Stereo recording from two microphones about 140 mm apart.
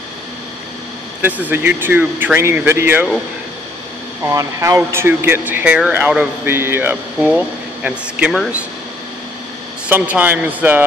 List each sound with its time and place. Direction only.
1.5 s speech: 15° right (ahead or behind)
4.2 s speech: 20° right (ahead or behind); by 8.5 s 5° right (ahead or behind)
9.8 s speech: 10° right (ahead or behind)